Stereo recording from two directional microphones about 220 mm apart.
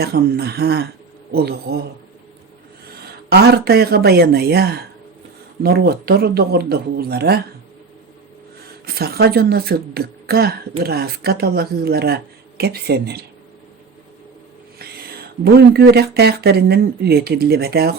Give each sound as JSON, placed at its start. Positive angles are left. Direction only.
{"t": 0.0, "sound": "a woman's voice", "side_deg": -45}
{"t": 3.0, "sound": "a woman's voice", "side_deg": -45}
{"t": 9.0, "sound": "a woman's voice", "side_deg": -45}
{"t": 14.8, "sound": "speech", "side_deg": -45}